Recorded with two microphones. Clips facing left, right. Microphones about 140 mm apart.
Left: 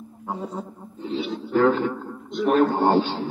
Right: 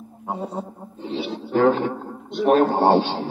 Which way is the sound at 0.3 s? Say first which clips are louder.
Right 2 dB; 25° right (ahead or behind).